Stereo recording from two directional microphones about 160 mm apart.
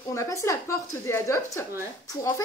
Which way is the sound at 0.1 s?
20° left (ahead or behind).